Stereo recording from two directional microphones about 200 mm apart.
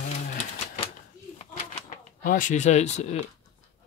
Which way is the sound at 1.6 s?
40° left (ahead or behind).